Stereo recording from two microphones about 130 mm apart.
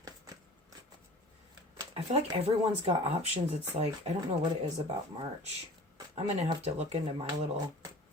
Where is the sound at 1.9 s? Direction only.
50° right (ahead or behind).